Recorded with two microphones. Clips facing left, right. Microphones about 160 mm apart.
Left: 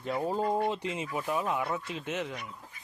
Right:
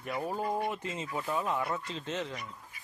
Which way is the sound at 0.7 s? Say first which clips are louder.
Left 3 dB; 15° left (ahead or behind).